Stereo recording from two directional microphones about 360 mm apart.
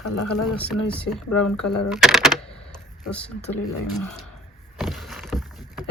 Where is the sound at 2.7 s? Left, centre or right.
Centre.